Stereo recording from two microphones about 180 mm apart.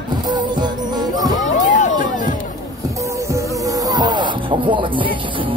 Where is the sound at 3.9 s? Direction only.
25° right (ahead or behind).